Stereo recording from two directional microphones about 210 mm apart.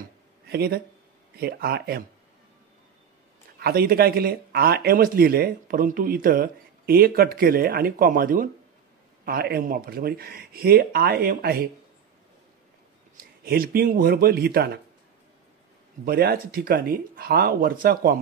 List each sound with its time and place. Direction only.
0.5 s speech: 45° right (ahead or behind)
3.5 s speech: 45° right (ahead or behind)
13.2 s speech: 45° right (ahead or behind)
16.1 s speech: 45° right (ahead or behind)